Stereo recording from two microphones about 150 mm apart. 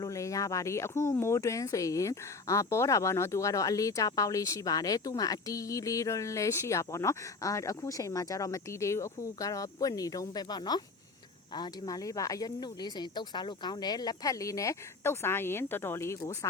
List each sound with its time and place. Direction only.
0.0 s speech: 20° left (ahead or behind)